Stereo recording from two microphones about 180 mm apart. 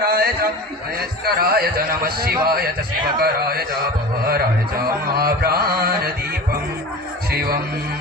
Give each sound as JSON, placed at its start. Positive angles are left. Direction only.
{"t": 0.0, "sound": "a man's voice", "side_deg": -60}
{"t": 5.1, "sound": "a man's voice", "side_deg": -55}
{"t": 7.3, "sound": "speech", "side_deg": -60}